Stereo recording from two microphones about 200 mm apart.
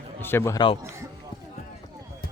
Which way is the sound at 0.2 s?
10° left (ahead or behind).